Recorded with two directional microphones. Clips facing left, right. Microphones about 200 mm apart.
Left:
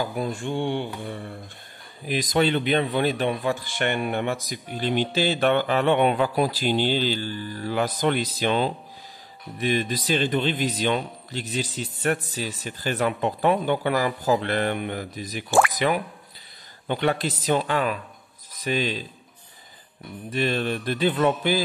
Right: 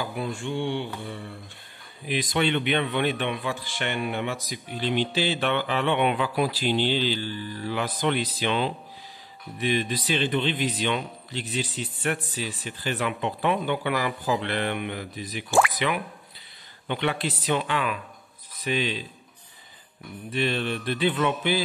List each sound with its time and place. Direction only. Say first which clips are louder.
0.1 s speech: left 2 dB; 40° left (ahead or behind)
2.0 s a man's voice: left 3 dB; 40° left (ahead or behind)
20.2 s a man's voice: left 2 dB; 40° left (ahead or behind)